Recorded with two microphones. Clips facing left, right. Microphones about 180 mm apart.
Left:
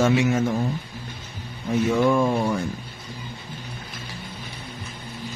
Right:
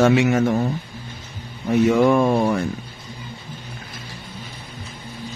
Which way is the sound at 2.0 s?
65° right (ahead or behind).